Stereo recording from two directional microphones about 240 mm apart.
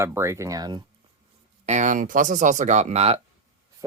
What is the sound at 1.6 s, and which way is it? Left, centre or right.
Speech, right.